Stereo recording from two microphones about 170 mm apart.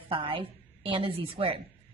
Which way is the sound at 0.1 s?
30° right (ahead or behind).